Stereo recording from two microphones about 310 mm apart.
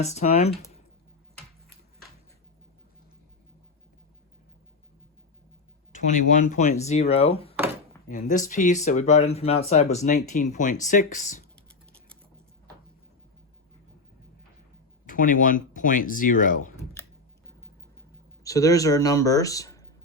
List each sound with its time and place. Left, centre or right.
0.0 s speech: left
5.9 s speech: left
15.0 s speech: left
18.4 s speech: centre